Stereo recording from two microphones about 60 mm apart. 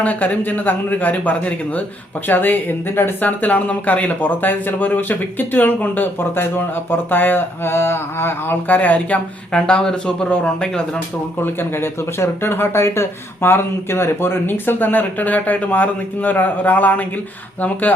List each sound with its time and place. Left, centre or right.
0.0 s speech: left
8.6 s speech: left
11.4 s speech: left